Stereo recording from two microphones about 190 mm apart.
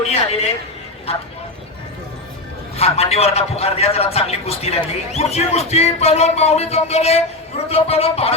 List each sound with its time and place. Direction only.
0.0 s a man's voice: 35° left (ahead or behind)
2.7 s a man's voice: 35° left (ahead or behind)